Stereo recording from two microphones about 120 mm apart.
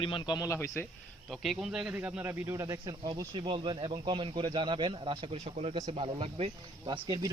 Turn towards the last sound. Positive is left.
turn(degrees=-40)  # may be behind; listen again after turning